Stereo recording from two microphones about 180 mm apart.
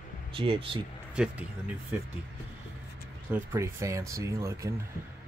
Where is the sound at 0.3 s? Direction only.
30° right (ahead or behind).